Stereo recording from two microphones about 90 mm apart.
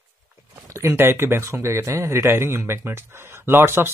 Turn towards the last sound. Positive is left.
turn(degrees=-25)  # may be behind; listen again after turning